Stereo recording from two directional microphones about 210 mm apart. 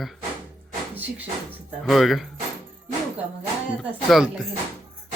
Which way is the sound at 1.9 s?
Centre (ahead or behind).